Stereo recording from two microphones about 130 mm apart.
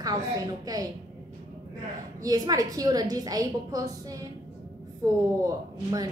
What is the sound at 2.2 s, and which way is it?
A woman's voice, 30° right (ahead or behind).